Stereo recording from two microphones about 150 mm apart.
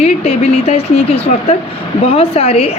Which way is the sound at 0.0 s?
45° left (ahead or behind).